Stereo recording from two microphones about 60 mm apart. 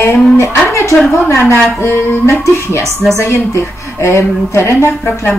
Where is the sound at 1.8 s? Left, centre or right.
Left.